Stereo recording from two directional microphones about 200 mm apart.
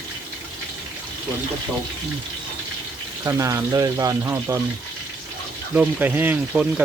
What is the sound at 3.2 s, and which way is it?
Speech, 15° right (ahead or behind).